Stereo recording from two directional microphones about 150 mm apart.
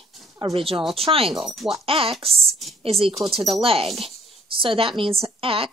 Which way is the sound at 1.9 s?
40° right (ahead or behind).